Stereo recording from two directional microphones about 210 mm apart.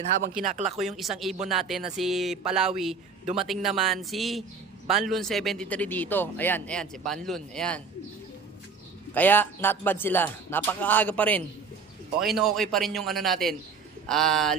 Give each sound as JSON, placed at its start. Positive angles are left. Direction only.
{"t": 0.4, "sound": "speech", "side_deg": -30}
{"t": 0.8, "sound": "a man's voice", "side_deg": 0}
{"t": 9.1, "sound": "a man's voice", "side_deg": 10}